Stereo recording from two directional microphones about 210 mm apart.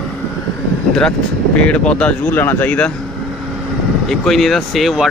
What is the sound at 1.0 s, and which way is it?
Speech, 5° left (ahead or behind).